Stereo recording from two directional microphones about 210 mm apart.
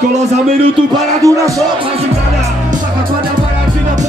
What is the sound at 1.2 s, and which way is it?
Speech, 15° right (ahead or behind).